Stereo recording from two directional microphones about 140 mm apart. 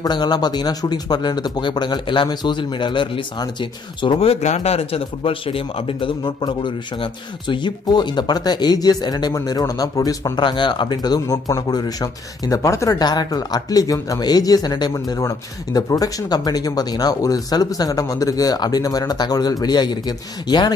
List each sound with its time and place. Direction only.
0.0 s speech: 30° left (ahead or behind)